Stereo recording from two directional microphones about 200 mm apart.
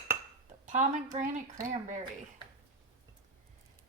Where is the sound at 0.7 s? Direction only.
40° right (ahead or behind).